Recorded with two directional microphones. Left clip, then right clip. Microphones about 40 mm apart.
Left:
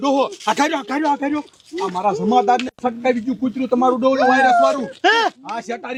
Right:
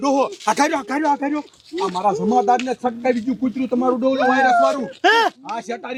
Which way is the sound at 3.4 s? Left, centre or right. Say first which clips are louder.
Left 3 dB; right.